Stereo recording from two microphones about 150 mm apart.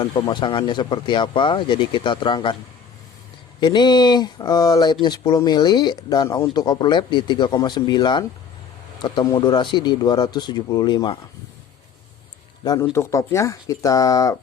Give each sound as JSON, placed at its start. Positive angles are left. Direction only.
{"t": 0.0, "sound": "speech", "side_deg": 30}
{"t": 3.6, "sound": "speech", "side_deg": 30}
{"t": 12.6, "sound": "speech", "side_deg": 20}